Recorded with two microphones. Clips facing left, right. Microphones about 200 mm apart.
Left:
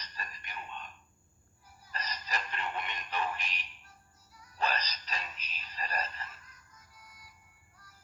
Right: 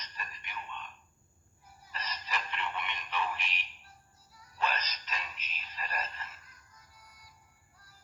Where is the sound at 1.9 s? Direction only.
40° left (ahead or behind).